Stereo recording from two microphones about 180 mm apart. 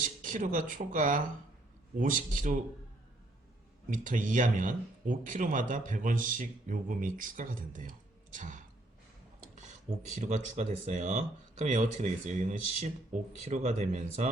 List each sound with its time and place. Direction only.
0.0 s speech: 45° right (ahead or behind)
3.8 s speech: 45° right (ahead or behind)
10.2 s speech: 40° right (ahead or behind)